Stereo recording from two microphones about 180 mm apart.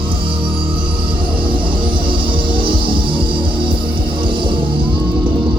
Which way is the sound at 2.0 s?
30° right (ahead or behind).